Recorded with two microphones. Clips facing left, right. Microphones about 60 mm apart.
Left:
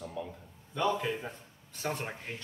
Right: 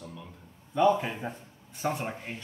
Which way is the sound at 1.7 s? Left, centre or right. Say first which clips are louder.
Right 4 dB; centre.